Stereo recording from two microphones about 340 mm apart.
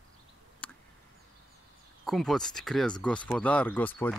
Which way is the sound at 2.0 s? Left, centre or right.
Centre.